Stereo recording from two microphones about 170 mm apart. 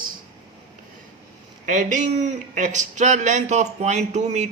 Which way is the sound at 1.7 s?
45° right (ahead or behind).